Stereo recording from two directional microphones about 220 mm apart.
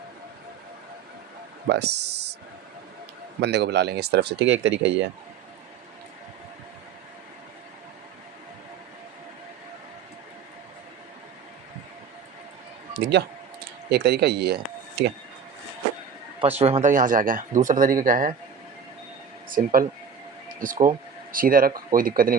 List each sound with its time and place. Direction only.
1.7 s speech: 50° right (ahead or behind)
3.4 s speech: 50° right (ahead or behind)
13.0 s speech: 50° right (ahead or behind)
16.4 s speech: 25° right (ahead or behind)
19.5 s speech: 40° right (ahead or behind)